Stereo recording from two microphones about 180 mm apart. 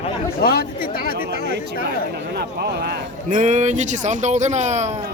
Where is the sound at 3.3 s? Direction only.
40° right (ahead or behind).